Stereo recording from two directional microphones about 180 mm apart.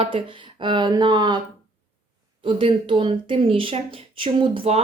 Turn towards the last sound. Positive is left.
turn(degrees=-30)  # may be behind; listen again after turning